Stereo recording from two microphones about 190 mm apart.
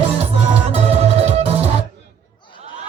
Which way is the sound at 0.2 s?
35° right (ahead or behind).